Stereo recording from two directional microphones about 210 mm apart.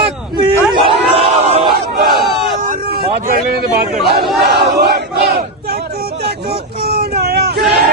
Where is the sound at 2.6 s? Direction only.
40° right (ahead or behind).